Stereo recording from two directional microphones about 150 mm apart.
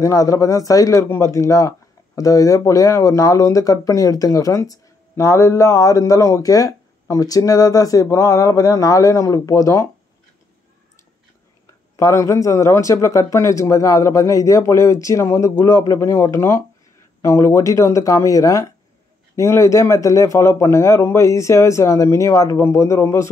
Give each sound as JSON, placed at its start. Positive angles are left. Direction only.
{"t": 0.0, "sound": "speech", "side_deg": 20}
{"t": 12.0, "sound": "speech", "side_deg": 20}